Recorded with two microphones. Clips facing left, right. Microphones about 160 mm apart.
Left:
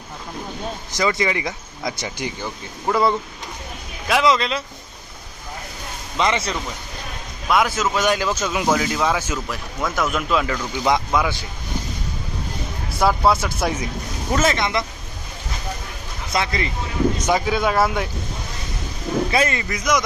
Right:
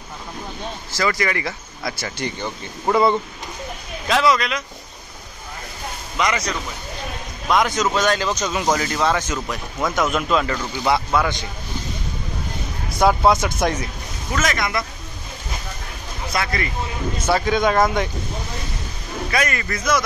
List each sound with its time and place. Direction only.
0.9 s speech: 20° left (ahead or behind)
2.9 s speech: centre (ahead or behind)
4.1 s speech: 20° left (ahead or behind)
6.1 s speech: 25° left (ahead or behind)
7.4 s speech: 5° left (ahead or behind)
13.0 s speech: 5° left (ahead or behind)
14.3 s speech: 30° left (ahead or behind)
16.3 s speech: 20° left (ahead or behind)
17.3 s speech: 5° left (ahead or behind)
19.3 s speech: 25° left (ahead or behind)
19.6 s speech: 15° left (ahead or behind)